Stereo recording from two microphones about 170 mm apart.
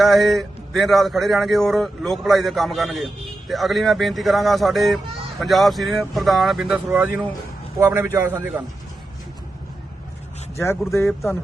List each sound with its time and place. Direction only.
0.0 s a man's voice: centre (ahead or behind)
10.8 s speech: 15° left (ahead or behind)